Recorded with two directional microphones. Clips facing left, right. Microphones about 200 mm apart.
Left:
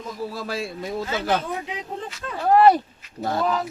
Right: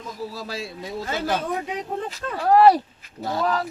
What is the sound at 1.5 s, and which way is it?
Speech, 40° right (ahead or behind).